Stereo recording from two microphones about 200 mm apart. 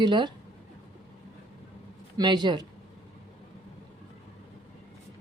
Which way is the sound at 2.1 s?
20° right (ahead or behind).